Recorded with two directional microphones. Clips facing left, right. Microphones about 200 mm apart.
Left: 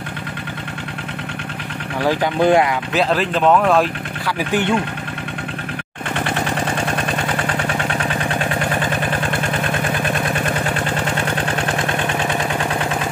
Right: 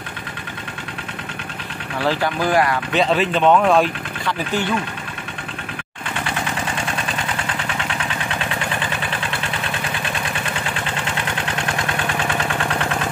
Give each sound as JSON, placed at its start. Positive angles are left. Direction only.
{"t": 2.0, "sound": "speech", "side_deg": 15}
{"t": 2.9, "sound": "speech", "side_deg": 0}
{"t": 4.4, "sound": "speech", "side_deg": 15}
{"t": 8.5, "sound": "vehicle", "side_deg": 45}